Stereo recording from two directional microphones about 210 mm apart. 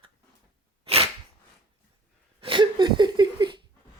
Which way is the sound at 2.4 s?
25° right (ahead or behind).